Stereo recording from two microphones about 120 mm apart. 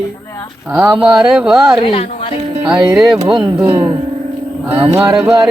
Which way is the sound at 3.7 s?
55° right (ahead or behind).